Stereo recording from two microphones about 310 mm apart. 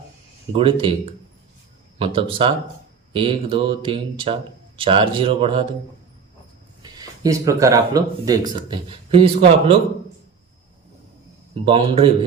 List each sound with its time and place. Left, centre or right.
0.5 s speech: centre
2.0 s speech: centre
7.0 s speech: centre
11.6 s speech: centre